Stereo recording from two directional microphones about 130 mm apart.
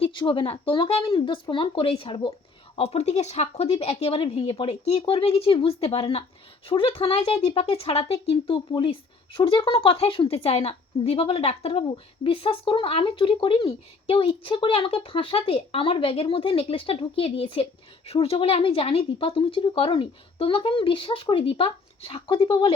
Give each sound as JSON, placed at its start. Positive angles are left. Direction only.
{"t": 0.0, "sound": "speech", "side_deg": 40}